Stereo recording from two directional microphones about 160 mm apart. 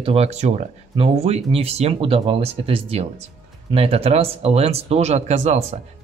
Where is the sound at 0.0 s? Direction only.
40° right (ahead or behind).